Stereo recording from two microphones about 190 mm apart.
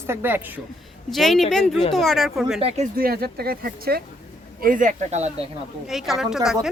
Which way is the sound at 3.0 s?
50° right (ahead or behind).